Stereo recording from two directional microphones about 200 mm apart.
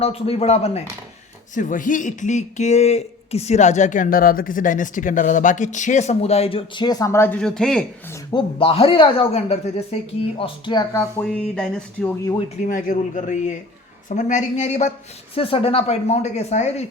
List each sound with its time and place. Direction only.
0.0 s a man's voice: 30° left (ahead or behind); by 7.9 s 5° left (ahead or behind)
8.1 s speech: 20° left (ahead or behind)
11.3 s speech: 5° left (ahead or behind)
12.6 s a man's voice: 40° left (ahead or behind)